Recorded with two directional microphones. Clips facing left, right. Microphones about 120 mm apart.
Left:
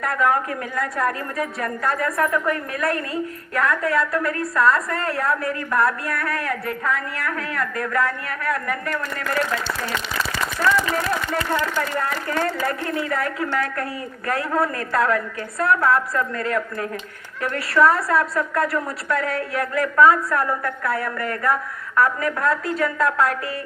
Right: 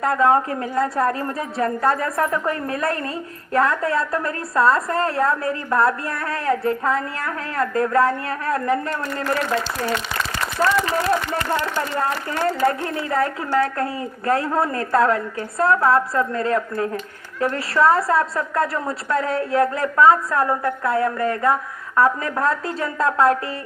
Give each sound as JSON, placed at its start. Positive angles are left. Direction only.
{"t": 0.0, "sound": "a woman's voice", "side_deg": -30}
{"t": 11.5, "sound": "a woman's voice", "side_deg": -25}